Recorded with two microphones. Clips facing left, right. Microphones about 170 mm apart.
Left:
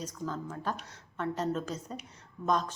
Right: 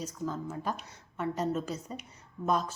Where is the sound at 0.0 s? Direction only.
5° right (ahead or behind).